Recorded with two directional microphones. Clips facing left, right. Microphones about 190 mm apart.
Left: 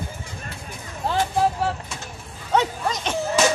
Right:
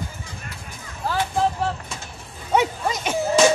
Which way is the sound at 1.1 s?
25° left (ahead or behind).